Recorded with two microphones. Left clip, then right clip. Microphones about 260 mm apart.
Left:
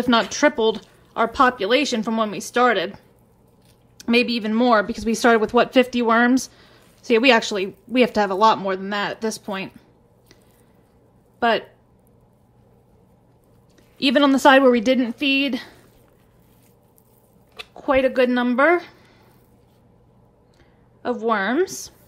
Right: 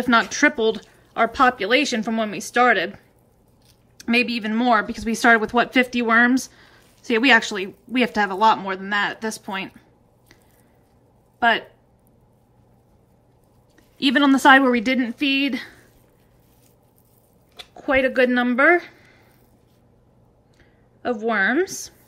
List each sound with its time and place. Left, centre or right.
0.0 s speech: centre
4.0 s speech: centre
11.3 s speech: centre
13.9 s a woman's voice: centre
17.7 s a woman's voice: centre
21.0 s speech: centre